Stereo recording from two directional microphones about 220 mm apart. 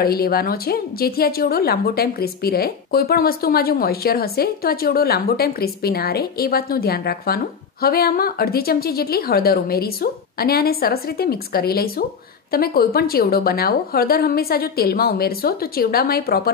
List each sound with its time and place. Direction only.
0.0 s a woman's voice: 45° left (ahead or behind)